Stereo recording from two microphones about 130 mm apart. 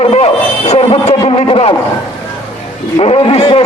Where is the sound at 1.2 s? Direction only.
40° left (ahead or behind).